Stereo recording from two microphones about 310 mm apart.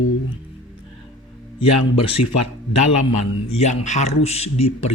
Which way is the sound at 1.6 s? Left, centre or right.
Centre.